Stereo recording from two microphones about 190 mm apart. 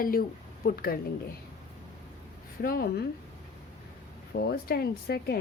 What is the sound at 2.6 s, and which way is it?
Speech, 50° left (ahead or behind).